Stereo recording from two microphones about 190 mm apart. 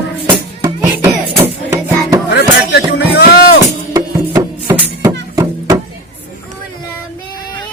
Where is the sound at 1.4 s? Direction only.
20° right (ahead or behind).